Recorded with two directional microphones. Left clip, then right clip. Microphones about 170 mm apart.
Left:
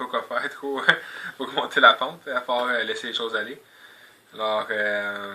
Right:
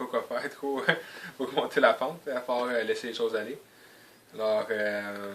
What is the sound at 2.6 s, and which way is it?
Speech, 25° right (ahead or behind).